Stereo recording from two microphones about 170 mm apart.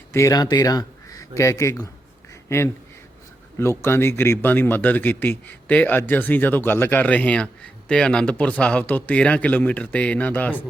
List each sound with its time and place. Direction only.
0.1 s speech: 20° left (ahead or behind)